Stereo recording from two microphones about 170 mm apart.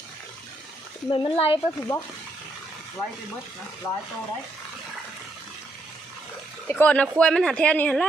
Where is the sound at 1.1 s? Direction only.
30° left (ahead or behind).